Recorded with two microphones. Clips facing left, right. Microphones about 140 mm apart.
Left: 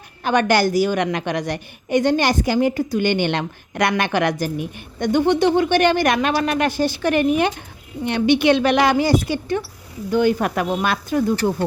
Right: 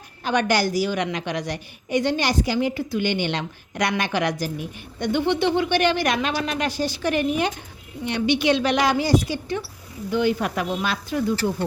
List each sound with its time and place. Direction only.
0.3 s a woman's voice: 55° left (ahead or behind)